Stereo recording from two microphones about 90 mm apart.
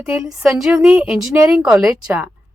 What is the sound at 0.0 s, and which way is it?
Speech, 10° right (ahead or behind).